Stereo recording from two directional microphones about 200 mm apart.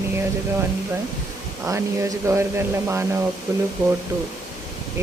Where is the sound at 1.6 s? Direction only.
15° right (ahead or behind).